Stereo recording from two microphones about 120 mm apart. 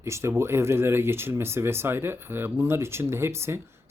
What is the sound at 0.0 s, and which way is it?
Speech, 25° right (ahead or behind).